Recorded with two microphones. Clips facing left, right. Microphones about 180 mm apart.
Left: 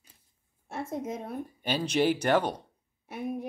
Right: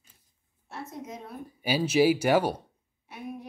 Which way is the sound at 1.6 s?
5° right (ahead or behind).